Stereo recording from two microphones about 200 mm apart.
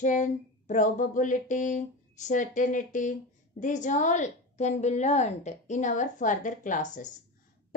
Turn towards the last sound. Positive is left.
turn(degrees=40)  # may be behind; listen again after turning